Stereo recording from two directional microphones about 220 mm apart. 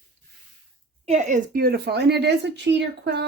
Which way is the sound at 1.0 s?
30° right (ahead or behind).